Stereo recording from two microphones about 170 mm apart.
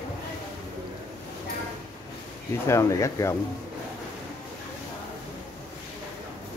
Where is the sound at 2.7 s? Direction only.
15° left (ahead or behind).